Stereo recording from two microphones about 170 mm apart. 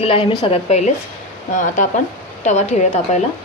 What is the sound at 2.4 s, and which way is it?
Speech, 40° left (ahead or behind).